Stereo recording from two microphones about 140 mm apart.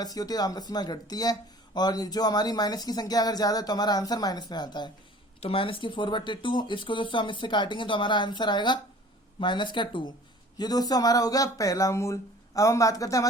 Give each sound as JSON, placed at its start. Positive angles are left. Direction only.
{"t": 0.0, "sound": "speech", "side_deg": 25}
{"t": 5.4, "sound": "speech", "side_deg": 40}